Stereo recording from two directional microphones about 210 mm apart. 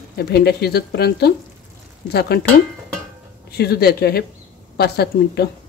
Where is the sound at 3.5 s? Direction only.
50° left (ahead or behind).